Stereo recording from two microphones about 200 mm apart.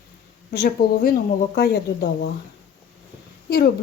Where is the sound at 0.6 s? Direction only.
45° left (ahead or behind).